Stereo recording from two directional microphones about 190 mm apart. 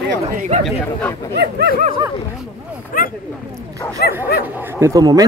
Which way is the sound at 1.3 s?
60° right (ahead or behind).